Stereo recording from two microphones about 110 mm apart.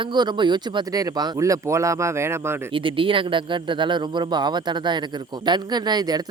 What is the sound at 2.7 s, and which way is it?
Speech, 50° right (ahead or behind).